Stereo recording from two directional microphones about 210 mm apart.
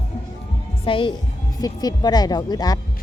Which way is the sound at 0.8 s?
25° left (ahead or behind).